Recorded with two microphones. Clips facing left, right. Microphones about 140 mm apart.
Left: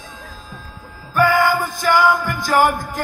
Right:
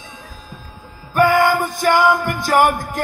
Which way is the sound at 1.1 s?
20° right (ahead or behind).